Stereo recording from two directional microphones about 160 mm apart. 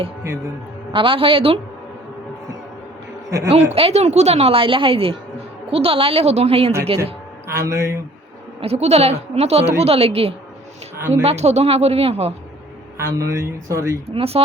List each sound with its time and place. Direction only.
0.9 s speech: 35° right (ahead or behind)
3.5 s speech: 40° right (ahead or behind)
7.0 s speech: 15° right (ahead or behind)
8.6 s speech: 40° right (ahead or behind)
13.0 s speech: 20° right (ahead or behind)
14.2 s speech: 35° right (ahead or behind)